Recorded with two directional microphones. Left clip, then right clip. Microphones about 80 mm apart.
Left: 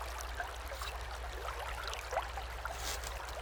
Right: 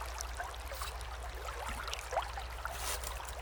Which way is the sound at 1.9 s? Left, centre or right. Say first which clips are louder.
Right 2 dB; right.